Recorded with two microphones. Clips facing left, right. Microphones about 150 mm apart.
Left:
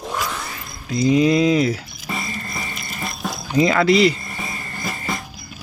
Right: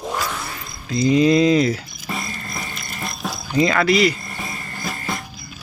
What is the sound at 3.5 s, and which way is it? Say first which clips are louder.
Speech: left 2 dB; 20° left (ahead or behind).